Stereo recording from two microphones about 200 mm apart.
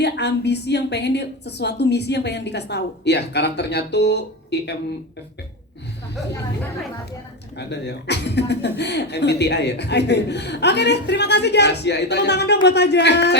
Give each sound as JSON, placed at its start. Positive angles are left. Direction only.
{"t": 0.0, "sound": "speech", "side_deg": 55}
{"t": 7.7, "sound": "speech", "side_deg": 55}